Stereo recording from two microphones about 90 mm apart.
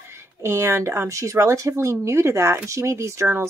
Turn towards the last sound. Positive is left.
turn(degrees=-30)  # may be behind; listen again after turning